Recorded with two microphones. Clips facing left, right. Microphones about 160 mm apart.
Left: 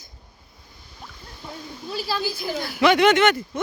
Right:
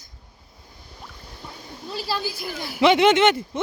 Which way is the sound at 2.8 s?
25° right (ahead or behind).